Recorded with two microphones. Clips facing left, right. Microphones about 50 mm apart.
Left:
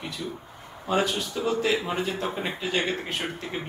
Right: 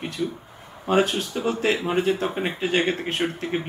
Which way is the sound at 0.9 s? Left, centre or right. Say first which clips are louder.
Right 5 dB; right.